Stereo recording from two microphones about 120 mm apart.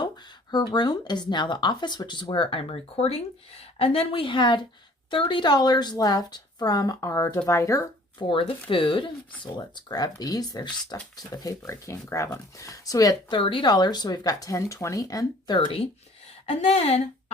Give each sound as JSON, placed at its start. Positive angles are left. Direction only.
{"t": 0.0, "sound": "a woman's voice", "side_deg": 35}
{"t": 8.3, "sound": "a woman's voice", "side_deg": 45}
{"t": 13.4, "sound": "a woman's voice", "side_deg": 45}
{"t": 15.5, "sound": "speech", "side_deg": 45}
{"t": 16.5, "sound": "a woman's voice", "side_deg": 60}